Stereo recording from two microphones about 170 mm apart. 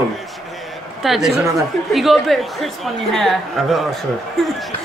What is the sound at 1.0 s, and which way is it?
A woman's voice, centre (ahead or behind).